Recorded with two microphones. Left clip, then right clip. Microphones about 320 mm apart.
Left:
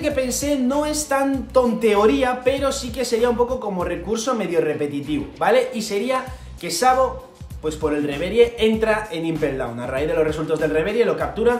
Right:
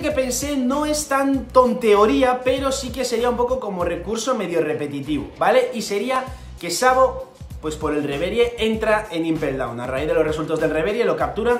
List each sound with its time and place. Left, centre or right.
0.0 s speech: centre